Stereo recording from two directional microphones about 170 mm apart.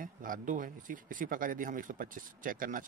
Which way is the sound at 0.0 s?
55° right (ahead or behind).